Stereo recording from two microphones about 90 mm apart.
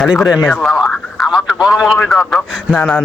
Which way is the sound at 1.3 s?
5° right (ahead or behind).